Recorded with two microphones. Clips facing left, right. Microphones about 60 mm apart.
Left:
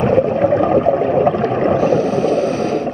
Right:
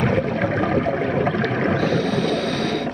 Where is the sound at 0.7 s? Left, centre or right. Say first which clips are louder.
Left 7 dB; right.